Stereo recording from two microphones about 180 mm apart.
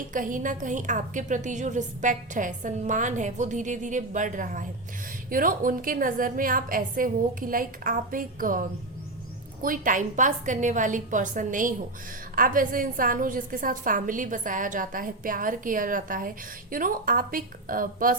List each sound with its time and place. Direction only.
0.1 s a woman's voice: 50° right (ahead or behind)